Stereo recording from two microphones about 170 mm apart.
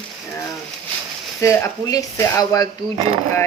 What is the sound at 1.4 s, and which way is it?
A woman's voice, 15° left (ahead or behind).